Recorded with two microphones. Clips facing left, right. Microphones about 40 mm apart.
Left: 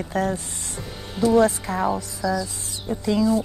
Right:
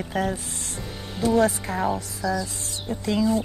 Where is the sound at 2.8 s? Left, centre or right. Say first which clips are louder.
Left 2 dB; centre.